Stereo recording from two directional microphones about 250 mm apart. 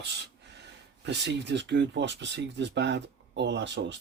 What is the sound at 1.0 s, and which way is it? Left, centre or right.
Speech, right.